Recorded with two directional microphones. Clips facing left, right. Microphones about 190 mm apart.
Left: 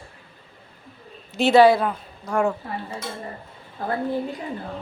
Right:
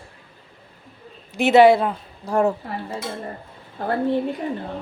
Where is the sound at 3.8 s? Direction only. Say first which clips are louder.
Right 4 dB; 35° right (ahead or behind).